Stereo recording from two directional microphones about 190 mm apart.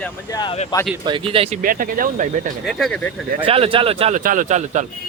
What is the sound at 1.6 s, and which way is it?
Speech, 45° right (ahead or behind).